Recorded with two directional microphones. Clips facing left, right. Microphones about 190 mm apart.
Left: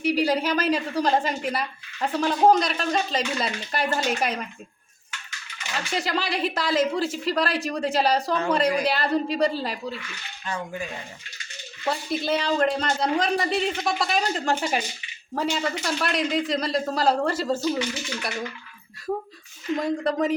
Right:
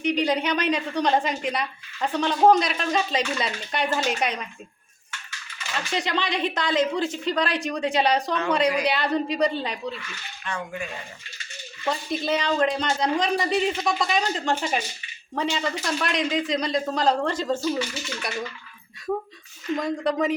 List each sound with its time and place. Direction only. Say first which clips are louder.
0.0 s speech: left 1 dB; 5° left (ahead or behind)
5.7 s speech: even; centre (ahead or behind)
11.9 s speech: even; centre (ahead or behind)
17.6 s speech: left 1 dB; 15° left (ahead or behind)
19.8 s speech: even; centre (ahead or behind)